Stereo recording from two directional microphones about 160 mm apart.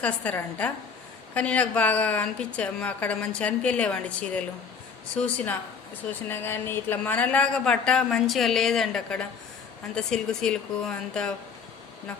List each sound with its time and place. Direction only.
0.0 s a woman's voice: 10° left (ahead or behind)